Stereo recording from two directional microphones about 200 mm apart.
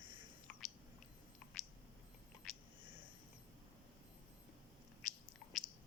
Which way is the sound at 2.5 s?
Centre (ahead or behind).